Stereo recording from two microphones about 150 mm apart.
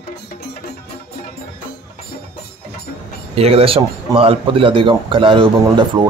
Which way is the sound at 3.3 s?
40° right (ahead or behind).